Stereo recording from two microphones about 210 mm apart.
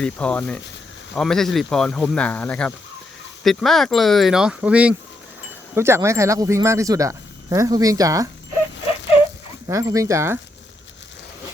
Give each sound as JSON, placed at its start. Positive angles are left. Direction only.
{"t": 0.0, "sound": "speech", "side_deg": 5}
{"t": 9.6, "sound": "speech", "side_deg": -15}